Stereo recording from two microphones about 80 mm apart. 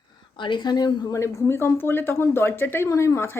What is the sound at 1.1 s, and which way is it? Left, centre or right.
Speech, left.